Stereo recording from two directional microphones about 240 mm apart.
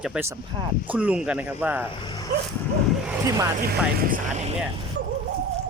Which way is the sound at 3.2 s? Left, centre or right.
Centre.